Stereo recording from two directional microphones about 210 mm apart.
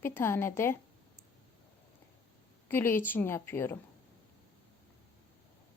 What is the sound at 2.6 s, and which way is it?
Speech, 10° left (ahead or behind).